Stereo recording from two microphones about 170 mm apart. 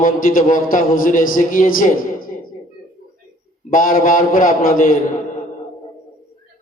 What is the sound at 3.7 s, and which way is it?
A man's voice, 55° left (ahead or behind).